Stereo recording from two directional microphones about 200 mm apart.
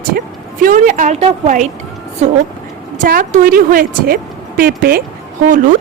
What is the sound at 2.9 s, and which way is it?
A woman's voice, 40° right (ahead or behind).